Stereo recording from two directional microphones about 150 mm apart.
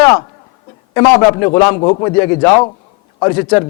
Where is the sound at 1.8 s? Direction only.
35° left (ahead or behind).